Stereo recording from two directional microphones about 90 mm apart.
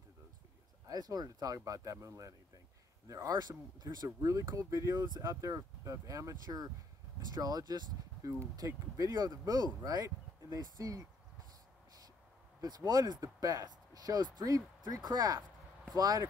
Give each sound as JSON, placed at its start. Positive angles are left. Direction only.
{"t": 0.8, "sound": "speech", "side_deg": -45}
{"t": 12.5, "sound": "speech", "side_deg": -50}